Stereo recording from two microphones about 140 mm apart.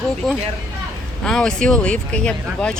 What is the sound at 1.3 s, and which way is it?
Speech, 5° left (ahead or behind).